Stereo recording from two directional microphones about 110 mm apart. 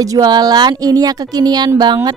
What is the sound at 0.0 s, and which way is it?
A woman's voice, 35° right (ahead or behind).